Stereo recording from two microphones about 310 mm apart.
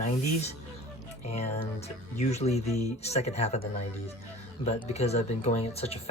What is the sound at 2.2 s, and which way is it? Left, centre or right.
Speech, left.